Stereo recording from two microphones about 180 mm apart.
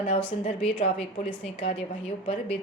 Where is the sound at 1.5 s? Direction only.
30° left (ahead or behind).